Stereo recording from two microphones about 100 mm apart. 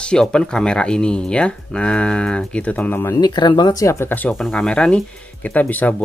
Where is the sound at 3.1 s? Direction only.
45° left (ahead or behind).